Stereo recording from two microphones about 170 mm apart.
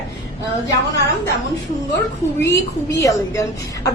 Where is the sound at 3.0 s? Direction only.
20° left (ahead or behind).